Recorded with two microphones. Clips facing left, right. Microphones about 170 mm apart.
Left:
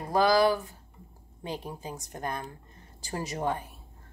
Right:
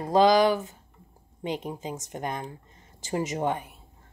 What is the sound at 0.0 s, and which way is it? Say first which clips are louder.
Speech: right 3 dB; 20° right (ahead or behind).